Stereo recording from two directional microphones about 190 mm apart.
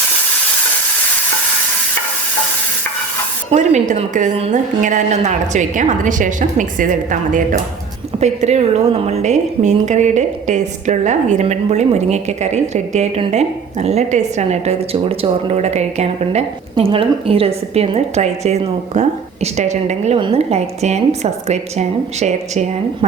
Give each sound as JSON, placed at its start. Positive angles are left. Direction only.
{"t": 3.5, "sound": "a woman's voice", "side_deg": -40}